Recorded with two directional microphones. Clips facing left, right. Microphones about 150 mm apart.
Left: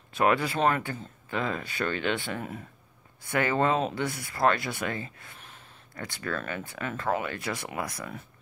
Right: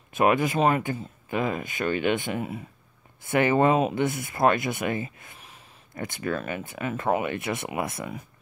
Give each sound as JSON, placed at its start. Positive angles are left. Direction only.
{"t": 0.1, "sound": "speech", "side_deg": -20}